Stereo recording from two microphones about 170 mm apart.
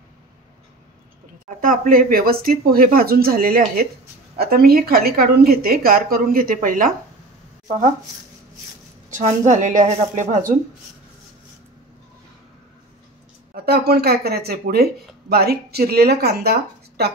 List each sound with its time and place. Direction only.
1.6 s a woman's voice: 55° right (ahead or behind)
9.1 s a woman's voice: 45° right (ahead or behind)
13.7 s speech: 65° right (ahead or behind)